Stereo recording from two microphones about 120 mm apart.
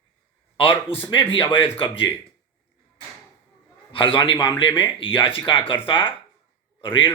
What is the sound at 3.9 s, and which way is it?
Speech, 45° left (ahead or behind).